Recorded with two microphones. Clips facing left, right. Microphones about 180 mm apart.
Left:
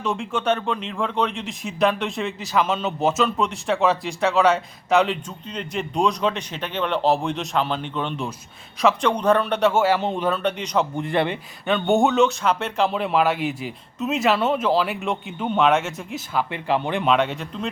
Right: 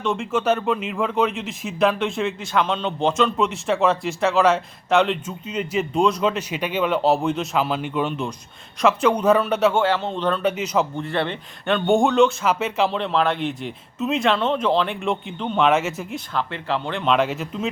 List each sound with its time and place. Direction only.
0.0 s speech: centre (ahead or behind)
10.4 s speech: 5° right (ahead or behind)
10.9 s speech: 15° left (ahead or behind)
11.6 s speech: centre (ahead or behind)
13.0 s speech: 10° left (ahead or behind)
16.3 s speech: 10° left (ahead or behind)
17.1 s speech: centre (ahead or behind)